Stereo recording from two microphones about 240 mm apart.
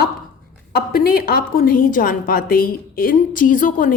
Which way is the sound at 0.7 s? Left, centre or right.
Left.